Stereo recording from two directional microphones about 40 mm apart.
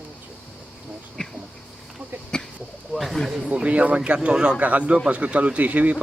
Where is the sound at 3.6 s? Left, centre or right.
Right.